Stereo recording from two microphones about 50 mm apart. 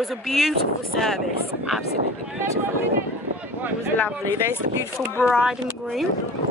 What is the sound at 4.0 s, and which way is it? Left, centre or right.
Speech, left.